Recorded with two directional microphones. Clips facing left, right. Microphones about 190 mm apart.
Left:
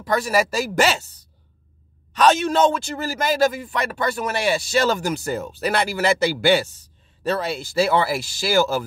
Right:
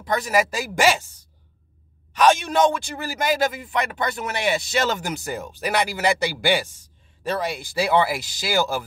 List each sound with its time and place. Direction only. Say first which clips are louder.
0.0 s a man's voice: left 1 dB; 20° right (ahead or behind)
2.1 s a man's voice: left 1 dB; 10° right (ahead or behind)